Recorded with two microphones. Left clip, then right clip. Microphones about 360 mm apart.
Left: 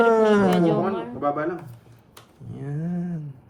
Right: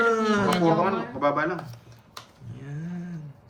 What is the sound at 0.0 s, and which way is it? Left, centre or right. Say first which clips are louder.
Speech: left 5 dB; centre.